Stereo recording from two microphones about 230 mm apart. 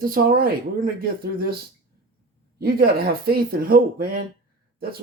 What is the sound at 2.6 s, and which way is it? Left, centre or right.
Speech, right.